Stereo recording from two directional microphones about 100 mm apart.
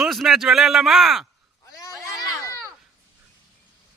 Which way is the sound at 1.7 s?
35° left (ahead or behind).